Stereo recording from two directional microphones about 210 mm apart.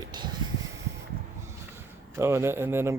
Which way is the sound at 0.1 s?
20° right (ahead or behind).